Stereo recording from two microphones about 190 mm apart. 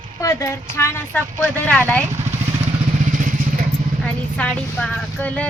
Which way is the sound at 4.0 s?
5° left (ahead or behind).